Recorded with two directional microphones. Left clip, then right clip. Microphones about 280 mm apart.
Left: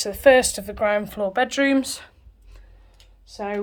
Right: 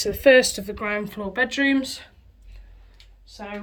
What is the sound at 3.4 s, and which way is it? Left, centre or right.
Speech, centre.